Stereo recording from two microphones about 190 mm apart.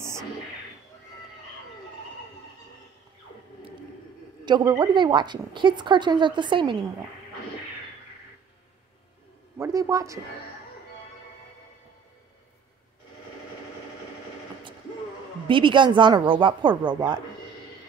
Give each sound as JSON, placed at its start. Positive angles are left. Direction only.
{"t": 4.5, "sound": "a woman's voice", "side_deg": -25}
{"t": 9.6, "sound": "speech", "side_deg": -15}
{"t": 15.4, "sound": "a woman's voice", "side_deg": -25}